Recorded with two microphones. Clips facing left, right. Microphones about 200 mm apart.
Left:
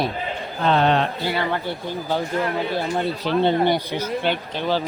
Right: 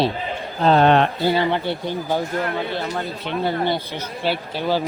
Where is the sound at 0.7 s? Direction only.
55° right (ahead or behind).